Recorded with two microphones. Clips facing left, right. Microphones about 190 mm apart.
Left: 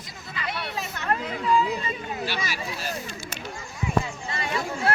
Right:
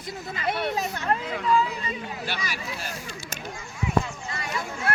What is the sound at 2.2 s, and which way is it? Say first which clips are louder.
Speech: left 2 dB; 50° right (ahead or behind).